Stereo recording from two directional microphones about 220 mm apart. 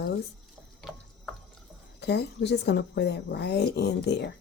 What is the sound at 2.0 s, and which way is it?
Speech, 50° left (ahead or behind).